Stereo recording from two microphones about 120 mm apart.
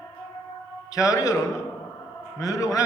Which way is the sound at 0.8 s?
30° left (ahead or behind).